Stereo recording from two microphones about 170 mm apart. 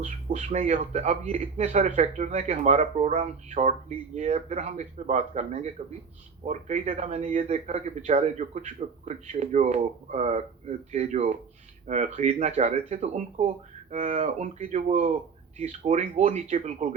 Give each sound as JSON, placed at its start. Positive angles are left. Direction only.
{"t": 0.0, "sound": "a man's voice", "side_deg": -45}